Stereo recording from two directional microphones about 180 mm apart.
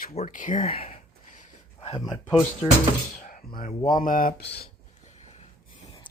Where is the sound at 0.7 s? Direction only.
30° left (ahead or behind).